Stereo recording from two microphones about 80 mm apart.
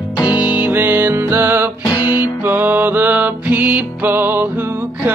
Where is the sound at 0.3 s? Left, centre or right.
Centre.